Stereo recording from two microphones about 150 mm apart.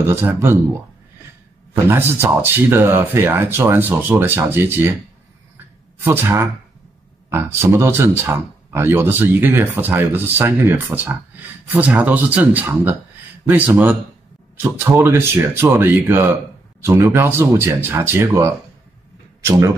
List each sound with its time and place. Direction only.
0.0 s speech: 15° right (ahead or behind)
1.9 s speech: 15° right (ahead or behind)
6.0 s speech: 15° right (ahead or behind)